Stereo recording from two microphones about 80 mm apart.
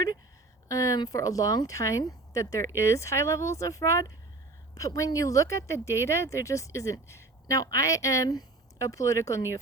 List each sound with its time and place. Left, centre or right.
0.7 s speech: left